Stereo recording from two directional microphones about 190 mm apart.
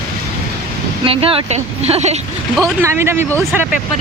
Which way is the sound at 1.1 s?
30° right (ahead or behind).